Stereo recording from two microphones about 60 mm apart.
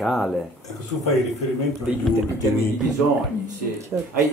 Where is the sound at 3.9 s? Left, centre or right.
Right.